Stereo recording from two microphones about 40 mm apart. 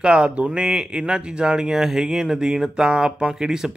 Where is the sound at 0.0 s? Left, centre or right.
Right.